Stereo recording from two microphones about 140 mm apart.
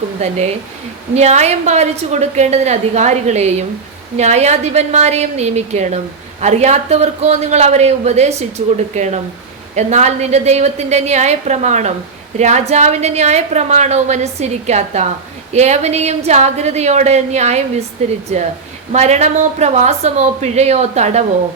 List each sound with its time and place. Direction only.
1.1 s a man's voice: 50° right (ahead or behind)
18.9 s a man's voice: 55° right (ahead or behind)